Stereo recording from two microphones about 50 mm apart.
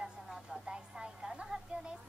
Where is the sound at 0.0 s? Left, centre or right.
Centre.